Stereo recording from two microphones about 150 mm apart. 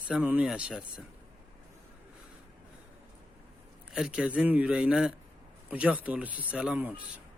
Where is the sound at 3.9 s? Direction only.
5° right (ahead or behind).